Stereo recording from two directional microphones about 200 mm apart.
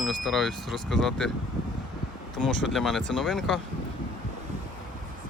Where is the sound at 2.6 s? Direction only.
Centre (ahead or behind).